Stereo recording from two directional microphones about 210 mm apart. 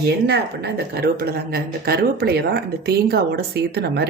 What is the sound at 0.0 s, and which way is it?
A woman's voice, 50° right (ahead or behind).